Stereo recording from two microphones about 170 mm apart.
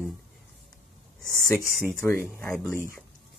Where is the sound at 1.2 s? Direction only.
Centre (ahead or behind).